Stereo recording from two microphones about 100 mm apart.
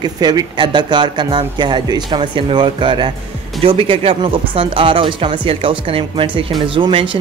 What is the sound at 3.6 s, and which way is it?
Speech, 70° right (ahead or behind).